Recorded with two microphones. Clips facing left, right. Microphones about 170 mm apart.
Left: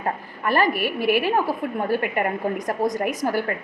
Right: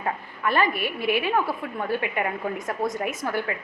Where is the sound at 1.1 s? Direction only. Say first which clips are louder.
Left 2 dB; 40° left (ahead or behind).